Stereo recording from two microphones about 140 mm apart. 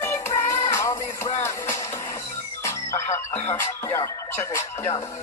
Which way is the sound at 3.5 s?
20° left (ahead or behind).